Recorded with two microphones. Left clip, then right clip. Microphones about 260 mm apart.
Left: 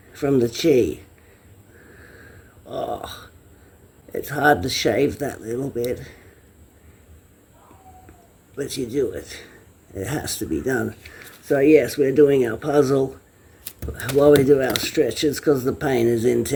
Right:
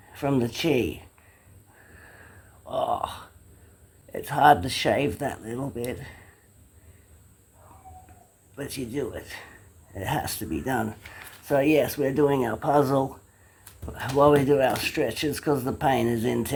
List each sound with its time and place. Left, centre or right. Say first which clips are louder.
0.1 s speech: left 6 dB; centre
2.6 s a sound: right 1 dB; centre
4.1 s speech: even; centre
8.5 s speech: left 8 dB; centre
11.4 s speech: left 6 dB; right
11.9 s speech: left 7 dB; centre
14.3 s speech: left 6 dB; centre